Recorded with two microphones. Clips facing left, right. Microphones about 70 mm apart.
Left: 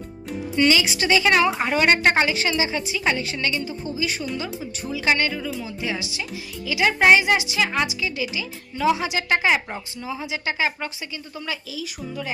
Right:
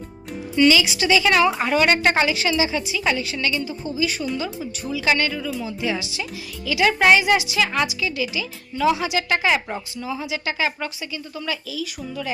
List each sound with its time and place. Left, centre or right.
0.5 s a woman's voice: left
1.5 s a woman's voice: left